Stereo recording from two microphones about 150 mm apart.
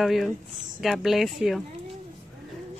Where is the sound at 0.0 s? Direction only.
Centre (ahead or behind).